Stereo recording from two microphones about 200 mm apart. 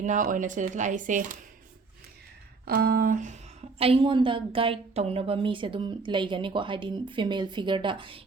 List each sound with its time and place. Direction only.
0.0 s speech: 40° right (ahead or behind)
2.6 s a sound: 50° right (ahead or behind)
3.8 s speech: 30° right (ahead or behind)